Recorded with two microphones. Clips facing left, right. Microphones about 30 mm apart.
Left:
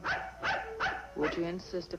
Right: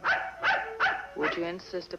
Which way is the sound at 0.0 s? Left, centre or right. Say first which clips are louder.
Right 7 dB; right.